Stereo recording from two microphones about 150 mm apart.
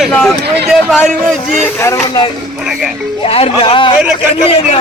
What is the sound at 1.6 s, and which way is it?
Speech, 15° left (ahead or behind).